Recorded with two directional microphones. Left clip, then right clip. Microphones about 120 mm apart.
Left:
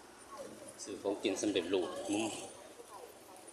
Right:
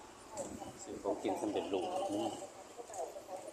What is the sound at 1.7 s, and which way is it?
Speech, 90° left.